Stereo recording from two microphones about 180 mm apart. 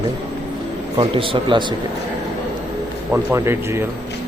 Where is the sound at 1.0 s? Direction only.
30° right (ahead or behind).